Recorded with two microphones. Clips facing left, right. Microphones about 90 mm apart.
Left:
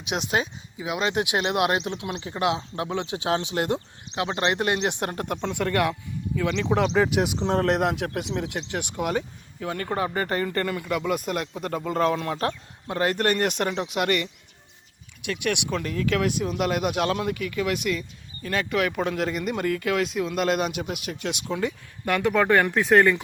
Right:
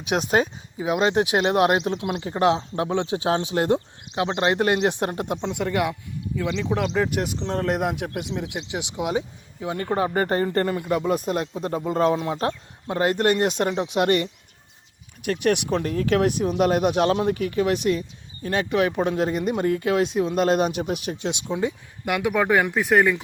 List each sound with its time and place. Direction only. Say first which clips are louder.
0.1 s speech: right 5 dB; 40° right (ahead or behind); by 5.4 s 20° right (ahead or behind)
5.5 s speech: left 1 dB; 10° right (ahead or behind)
21.5 s speech: right 2 dB; 15° right (ahead or behind)